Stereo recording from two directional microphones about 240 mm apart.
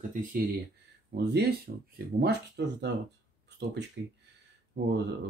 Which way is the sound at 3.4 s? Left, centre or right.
Right.